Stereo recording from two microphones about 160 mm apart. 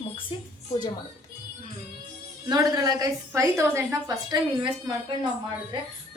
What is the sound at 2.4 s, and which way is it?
A woman's voice, 25° right (ahead or behind).